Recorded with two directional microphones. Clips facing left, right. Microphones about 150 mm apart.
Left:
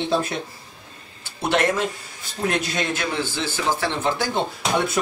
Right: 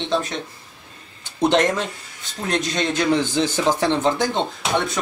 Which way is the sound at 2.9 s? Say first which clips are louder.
Right 7 dB; 15° right (ahead or behind).